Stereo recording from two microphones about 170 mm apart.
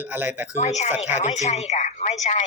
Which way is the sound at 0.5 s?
40° left (ahead or behind).